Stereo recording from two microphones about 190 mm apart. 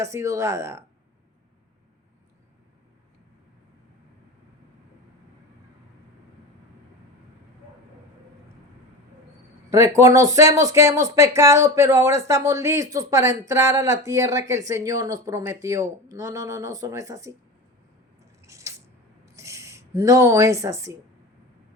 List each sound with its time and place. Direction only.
0.0 s speech: 15° right (ahead or behind)
9.6 s speech: 15° right (ahead or behind)
18.2 s drip: 15° right (ahead or behind)
19.4 s speech: 15° right (ahead or behind)